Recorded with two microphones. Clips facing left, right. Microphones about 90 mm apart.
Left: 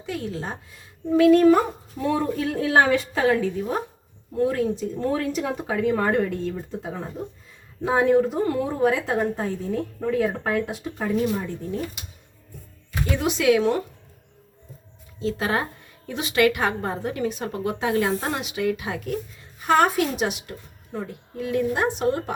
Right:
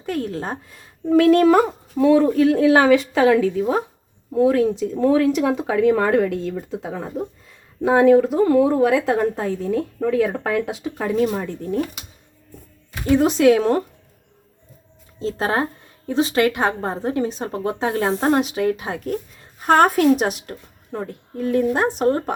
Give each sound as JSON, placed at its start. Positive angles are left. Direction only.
{"t": 0.0, "sound": "a woman's voice", "side_deg": -50}
{"t": 7.9, "sound": "a woman's voice", "side_deg": -90}
{"t": 13.1, "sound": "speech", "side_deg": -40}
{"t": 15.2, "sound": "a woman's voice", "side_deg": -35}